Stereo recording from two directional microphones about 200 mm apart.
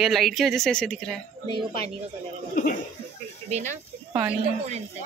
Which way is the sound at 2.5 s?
45° left (ahead or behind).